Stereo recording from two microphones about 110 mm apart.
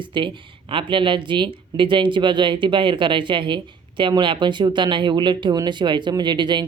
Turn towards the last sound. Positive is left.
turn(degrees=-45)  # may be behind; listen again after turning